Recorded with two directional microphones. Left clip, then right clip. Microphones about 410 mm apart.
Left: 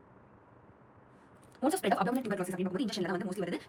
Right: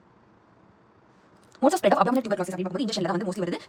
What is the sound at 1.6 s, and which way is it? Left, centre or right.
A woman's voice, centre.